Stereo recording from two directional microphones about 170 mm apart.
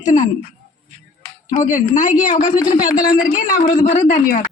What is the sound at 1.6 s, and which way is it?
Speech, 50° left (ahead or behind).